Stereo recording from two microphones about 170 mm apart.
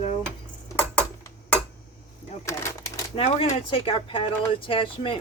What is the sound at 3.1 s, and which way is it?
Speech, 35° left (ahead or behind).